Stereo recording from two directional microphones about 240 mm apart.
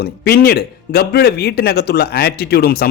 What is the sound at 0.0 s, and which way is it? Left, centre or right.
A man's voice, left.